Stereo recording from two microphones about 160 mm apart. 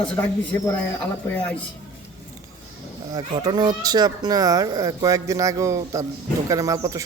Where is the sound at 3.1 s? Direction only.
25° right (ahead or behind).